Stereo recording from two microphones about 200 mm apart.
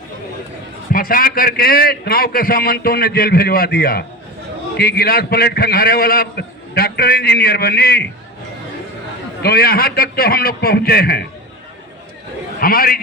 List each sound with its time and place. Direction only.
0.9 s a man's voice: 45° left (ahead or behind)
9.4 s a man's voice: 50° left (ahead or behind)
12.5 s a man's voice: 45° left (ahead or behind)